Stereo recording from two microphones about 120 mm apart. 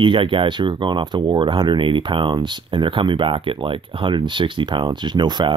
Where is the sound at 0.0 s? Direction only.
45° right (ahead or behind).